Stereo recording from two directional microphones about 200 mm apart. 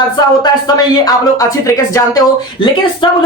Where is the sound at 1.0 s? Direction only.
15° left (ahead or behind).